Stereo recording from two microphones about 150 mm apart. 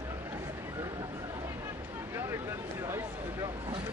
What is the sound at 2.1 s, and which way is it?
Speech, 15° right (ahead or behind).